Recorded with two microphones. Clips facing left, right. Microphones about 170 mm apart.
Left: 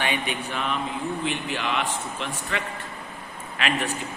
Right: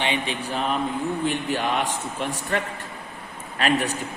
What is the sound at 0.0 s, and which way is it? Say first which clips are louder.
A man's voice: right 1 dB; 30° right (ahead or behind).